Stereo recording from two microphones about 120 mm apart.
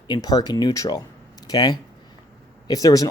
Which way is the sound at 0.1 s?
30° left (ahead or behind).